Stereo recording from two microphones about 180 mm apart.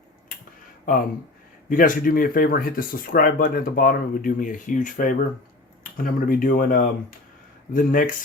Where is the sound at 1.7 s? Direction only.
50° left (ahead or behind).